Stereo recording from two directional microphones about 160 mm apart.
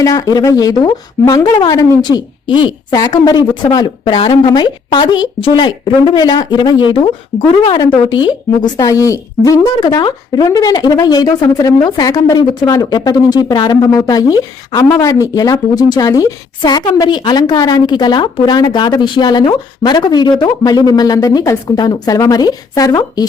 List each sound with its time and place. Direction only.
0.0 s speech: 20° left (ahead or behind)